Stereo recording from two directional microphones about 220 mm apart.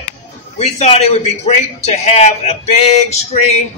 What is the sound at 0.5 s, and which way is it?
A man's voice, 30° left (ahead or behind).